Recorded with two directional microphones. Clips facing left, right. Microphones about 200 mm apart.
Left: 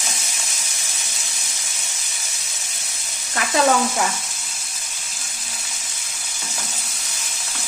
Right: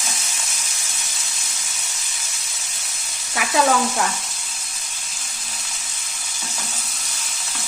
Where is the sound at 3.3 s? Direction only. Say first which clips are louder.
Left 1 dB; centre (ahead or behind).